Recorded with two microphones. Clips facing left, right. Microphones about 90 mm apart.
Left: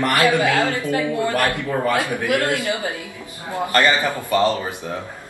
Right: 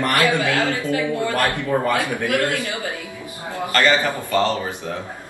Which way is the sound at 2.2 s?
20° left (ahead or behind).